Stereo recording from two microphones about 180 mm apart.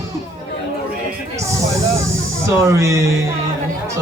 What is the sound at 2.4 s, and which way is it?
Speech, 15° right (ahead or behind).